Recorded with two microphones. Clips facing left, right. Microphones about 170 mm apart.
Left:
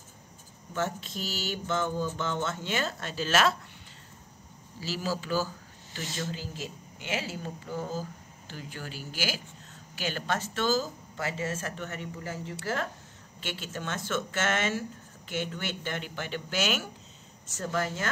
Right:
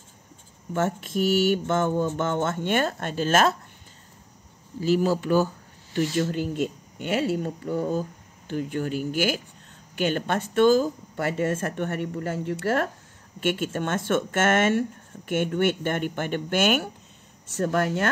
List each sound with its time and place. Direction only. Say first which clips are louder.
0.7 s speech: right 8 dB; 50° right (ahead or behind)
4.7 s speech: right 11 dB; 55° right (ahead or behind)